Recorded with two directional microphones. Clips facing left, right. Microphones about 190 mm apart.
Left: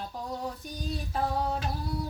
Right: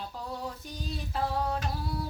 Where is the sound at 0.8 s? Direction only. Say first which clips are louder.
Left 1 dB; 15° left (ahead or behind).